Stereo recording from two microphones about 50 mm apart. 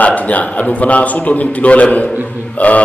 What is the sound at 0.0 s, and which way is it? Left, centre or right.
A man's voice, left.